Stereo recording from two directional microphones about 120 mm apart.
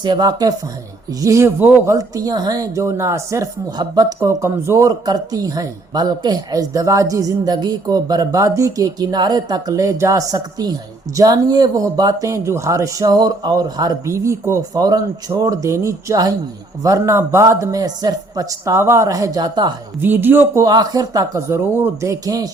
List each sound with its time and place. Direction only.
0.0 s a man's voice: 35° right (ahead or behind); by 2.0 s 20° right (ahead or behind)
2.0 s a man's voice: 30° right (ahead or behind)
20.0 s speech: 15° right (ahead or behind)
20.7 s speech: 35° right (ahead or behind)